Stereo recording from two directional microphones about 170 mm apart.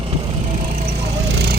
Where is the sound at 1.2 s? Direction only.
75° right (ahead or behind).